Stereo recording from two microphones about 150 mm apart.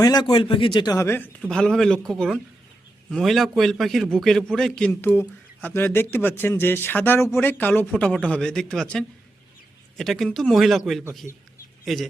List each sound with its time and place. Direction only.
0.0 s a man's voice: 25° left (ahead or behind)
1.4 s a man's voice: 5° left (ahead or behind)